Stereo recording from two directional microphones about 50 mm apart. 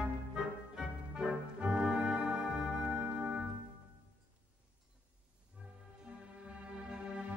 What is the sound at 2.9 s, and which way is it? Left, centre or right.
Organ, right.